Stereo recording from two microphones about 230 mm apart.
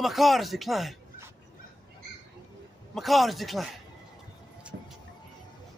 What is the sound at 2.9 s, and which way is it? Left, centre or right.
Speech, centre.